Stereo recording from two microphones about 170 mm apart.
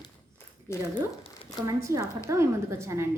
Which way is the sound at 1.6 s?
15° right (ahead or behind).